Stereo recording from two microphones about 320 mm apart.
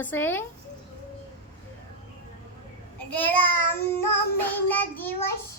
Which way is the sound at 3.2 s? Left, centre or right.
Centre.